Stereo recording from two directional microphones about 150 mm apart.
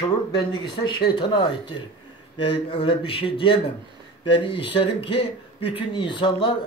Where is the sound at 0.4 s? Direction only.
30° left (ahead or behind).